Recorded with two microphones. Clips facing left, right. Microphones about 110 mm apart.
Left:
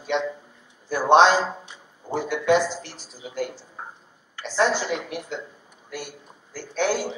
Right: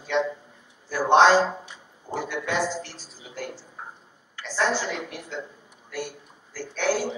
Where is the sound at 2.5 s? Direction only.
20° left (ahead or behind).